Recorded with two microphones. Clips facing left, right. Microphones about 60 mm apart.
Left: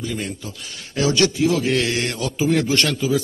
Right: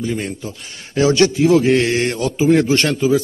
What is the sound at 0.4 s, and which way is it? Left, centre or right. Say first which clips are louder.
A man's voice: right 4 dB; right.